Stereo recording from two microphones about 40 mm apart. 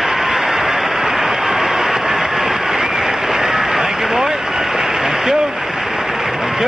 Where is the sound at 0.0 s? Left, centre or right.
Centre.